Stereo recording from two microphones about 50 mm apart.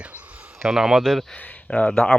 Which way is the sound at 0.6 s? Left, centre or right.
Centre.